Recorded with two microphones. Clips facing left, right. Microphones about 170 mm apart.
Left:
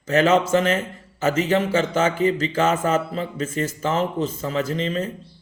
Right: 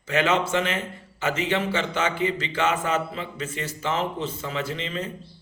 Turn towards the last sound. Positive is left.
turn(degrees=40)  # may be behind; listen again after turning